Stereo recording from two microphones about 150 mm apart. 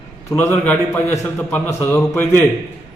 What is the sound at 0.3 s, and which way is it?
A man's voice, 15° left (ahead or behind).